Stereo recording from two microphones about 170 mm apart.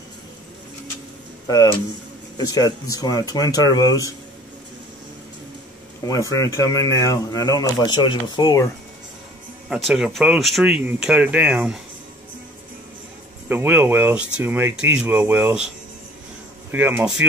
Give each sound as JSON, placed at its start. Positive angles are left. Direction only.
{"t": 1.5, "sound": "speech", "side_deg": 20}
{"t": 6.0, "sound": "speech", "side_deg": 20}
{"t": 9.7, "sound": "speech", "side_deg": -5}
{"t": 13.5, "sound": "speech", "side_deg": -10}
{"t": 16.7, "sound": "speech", "side_deg": -10}